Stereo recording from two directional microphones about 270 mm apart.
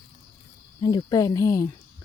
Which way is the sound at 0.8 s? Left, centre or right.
Centre.